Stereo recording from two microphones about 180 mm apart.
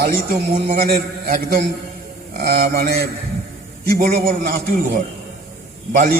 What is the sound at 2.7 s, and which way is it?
Speech, 60° right (ahead or behind).